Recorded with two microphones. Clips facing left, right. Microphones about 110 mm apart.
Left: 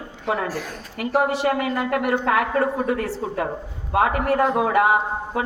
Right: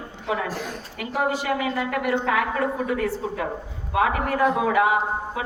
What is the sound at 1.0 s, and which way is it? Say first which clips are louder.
A woman's voice: left 5 dB; 50° left (ahead or behind).